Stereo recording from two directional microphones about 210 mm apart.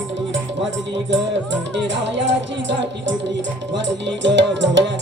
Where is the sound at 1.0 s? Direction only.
60° right (ahead or behind).